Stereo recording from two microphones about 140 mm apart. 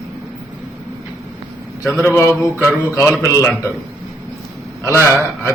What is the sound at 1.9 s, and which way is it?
A man's voice, 15° left (ahead or behind).